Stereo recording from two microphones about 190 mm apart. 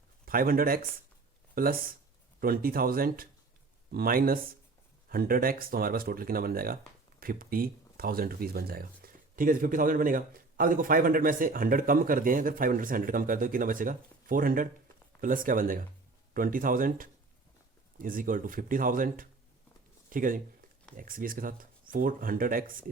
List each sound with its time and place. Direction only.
0.3 s speech: 50° right (ahead or behind)